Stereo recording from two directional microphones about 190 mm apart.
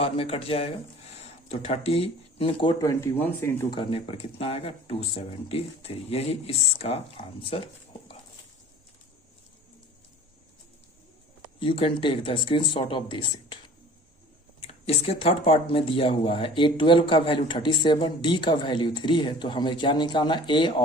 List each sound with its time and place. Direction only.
0.0 s speech: 30° left (ahead or behind)
3.0 s speech: 10° left (ahead or behind)
3.8 s speech: 30° left (ahead or behind)
11.6 s speech: 30° left (ahead or behind)
14.7 s speech: 30° left (ahead or behind)